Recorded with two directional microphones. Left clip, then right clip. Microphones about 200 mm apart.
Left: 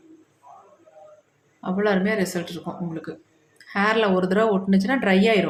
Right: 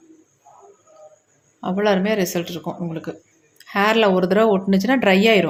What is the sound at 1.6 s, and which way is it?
Speech, 30° right (ahead or behind).